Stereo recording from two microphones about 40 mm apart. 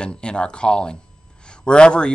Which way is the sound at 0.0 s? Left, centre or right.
Left.